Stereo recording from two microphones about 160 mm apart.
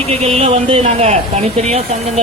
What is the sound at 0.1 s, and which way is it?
A man's voice, 40° right (ahead or behind).